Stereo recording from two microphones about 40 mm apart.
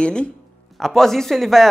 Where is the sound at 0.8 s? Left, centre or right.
Centre.